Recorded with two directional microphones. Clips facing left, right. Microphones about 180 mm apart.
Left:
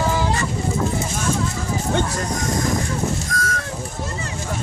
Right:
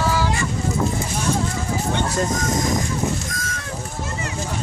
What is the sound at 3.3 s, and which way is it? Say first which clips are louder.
Goose: left 6 dB; 20° right (ahead or behind).